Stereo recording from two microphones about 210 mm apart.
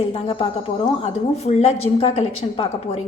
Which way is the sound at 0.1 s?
25° left (ahead or behind).